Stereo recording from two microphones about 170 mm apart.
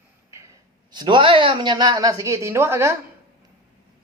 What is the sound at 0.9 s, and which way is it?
Speech, 25° right (ahead or behind).